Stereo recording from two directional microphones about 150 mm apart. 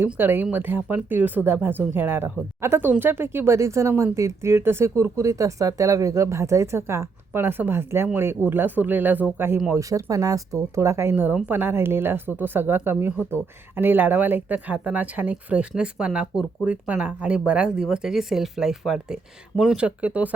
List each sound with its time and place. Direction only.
0.0 s speech: 15° right (ahead or behind)